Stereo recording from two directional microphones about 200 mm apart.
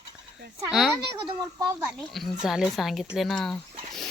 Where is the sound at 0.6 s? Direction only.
Centre (ahead or behind).